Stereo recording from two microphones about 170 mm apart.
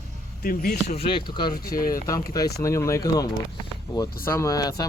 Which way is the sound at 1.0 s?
30° left (ahead or behind).